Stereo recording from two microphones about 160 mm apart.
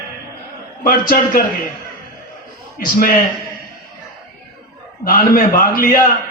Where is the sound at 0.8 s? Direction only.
65° left (ahead or behind).